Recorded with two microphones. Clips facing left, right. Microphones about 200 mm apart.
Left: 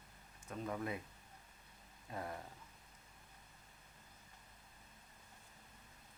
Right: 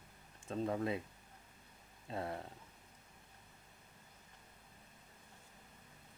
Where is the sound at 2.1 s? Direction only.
25° right (ahead or behind).